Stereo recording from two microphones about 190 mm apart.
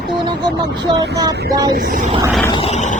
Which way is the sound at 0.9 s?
25° right (ahead or behind).